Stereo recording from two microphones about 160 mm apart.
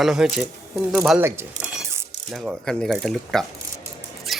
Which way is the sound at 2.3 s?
Centre (ahead or behind).